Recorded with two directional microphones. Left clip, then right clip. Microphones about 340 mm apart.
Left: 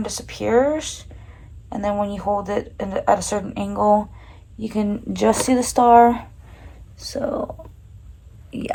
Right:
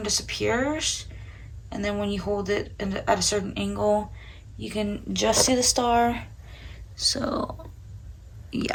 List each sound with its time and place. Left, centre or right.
0.0 s speech: centre
6.9 s speech: centre
7.3 s speech: centre